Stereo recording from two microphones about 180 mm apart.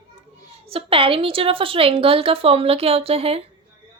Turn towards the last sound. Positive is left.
turn(degrees=-35)  # may be behind; listen again after turning